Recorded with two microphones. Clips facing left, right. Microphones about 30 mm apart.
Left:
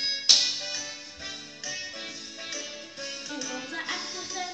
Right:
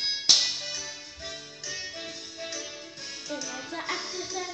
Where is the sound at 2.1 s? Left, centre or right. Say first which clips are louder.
Even; centre.